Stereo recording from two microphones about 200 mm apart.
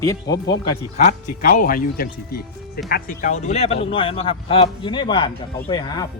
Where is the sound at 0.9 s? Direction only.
35° left (ahead or behind); by 6.1 s 20° left (ahead or behind).